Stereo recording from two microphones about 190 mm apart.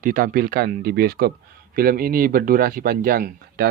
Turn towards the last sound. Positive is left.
turn(degrees=-50)  # may be behind; listen again after turning